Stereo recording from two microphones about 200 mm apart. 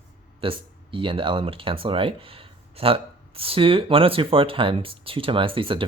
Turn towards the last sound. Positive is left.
turn(degrees=-25)  # may be behind; listen again after turning